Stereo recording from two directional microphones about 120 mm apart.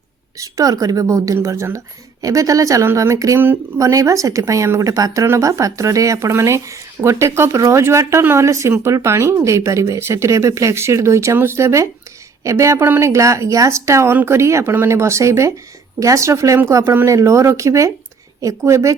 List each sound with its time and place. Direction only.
0.3 s a woman's voice: 30° right (ahead or behind)